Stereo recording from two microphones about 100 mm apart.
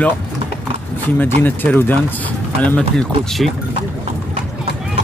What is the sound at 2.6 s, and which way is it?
Speech, 10° left (ahead or behind).